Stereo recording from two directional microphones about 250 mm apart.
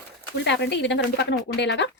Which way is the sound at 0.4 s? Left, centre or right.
Left.